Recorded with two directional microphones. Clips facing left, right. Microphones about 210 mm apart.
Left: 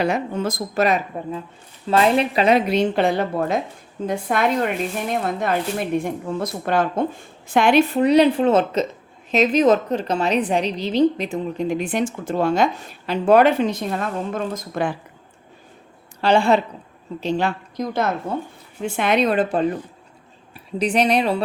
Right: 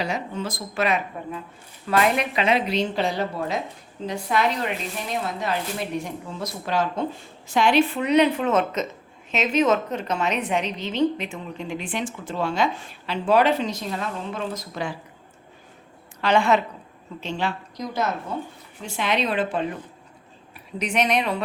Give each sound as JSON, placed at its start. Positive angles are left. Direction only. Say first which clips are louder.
{"t": 0.0, "sound": "a woman's voice", "louder": "left 6 dB", "side_deg": 50}
{"t": 16.2, "sound": "a woman's voice", "louder": "left 3 dB", "side_deg": 30}